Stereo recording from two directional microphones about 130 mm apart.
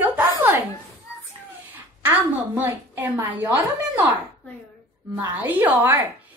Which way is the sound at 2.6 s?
15° right (ahead or behind).